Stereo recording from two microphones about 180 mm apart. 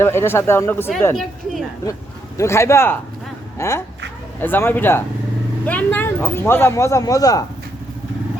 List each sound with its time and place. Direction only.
0.0 s speech: 15° left (ahead or behind)
2.4 s speech: 15° left (ahead or behind)